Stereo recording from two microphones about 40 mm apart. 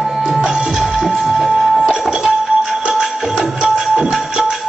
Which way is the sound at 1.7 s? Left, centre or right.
Centre.